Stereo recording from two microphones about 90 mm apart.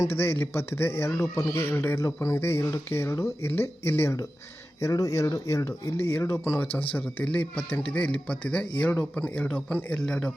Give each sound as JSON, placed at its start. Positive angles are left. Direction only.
{"t": 0.1, "sound": "a man's voice", "side_deg": 25}